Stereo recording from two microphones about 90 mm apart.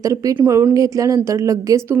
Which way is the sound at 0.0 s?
40° right (ahead or behind).